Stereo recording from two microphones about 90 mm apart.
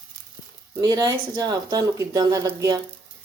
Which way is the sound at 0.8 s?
40° right (ahead or behind).